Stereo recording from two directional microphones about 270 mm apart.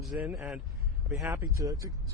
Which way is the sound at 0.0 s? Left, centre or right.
Centre.